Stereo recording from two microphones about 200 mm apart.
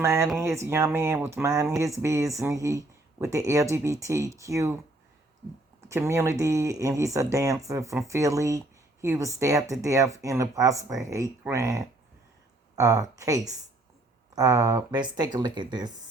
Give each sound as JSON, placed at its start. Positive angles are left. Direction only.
{"t": 0.0, "sound": "speech", "side_deg": -15}
{"t": 5.9, "sound": "speech", "side_deg": -15}